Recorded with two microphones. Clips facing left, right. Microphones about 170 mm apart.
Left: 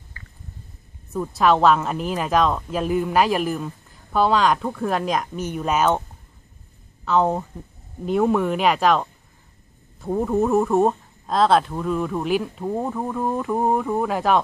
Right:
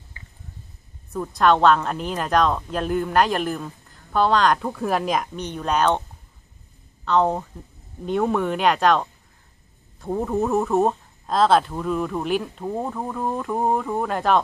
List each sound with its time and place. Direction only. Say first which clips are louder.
0.2 s a sound: left 2 dB; 20° right (ahead or behind)
1.1 s a woman's voice: even; 5° left (ahead or behind)
7.1 s a woman's voice: even; 5° left (ahead or behind)